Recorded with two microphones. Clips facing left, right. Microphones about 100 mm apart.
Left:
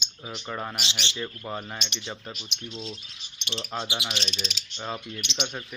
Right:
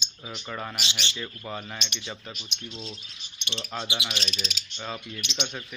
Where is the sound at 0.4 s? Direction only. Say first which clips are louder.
Left 1 dB; 15° left (ahead or behind).